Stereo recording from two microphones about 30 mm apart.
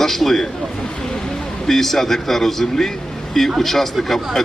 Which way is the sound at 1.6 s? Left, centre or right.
Centre.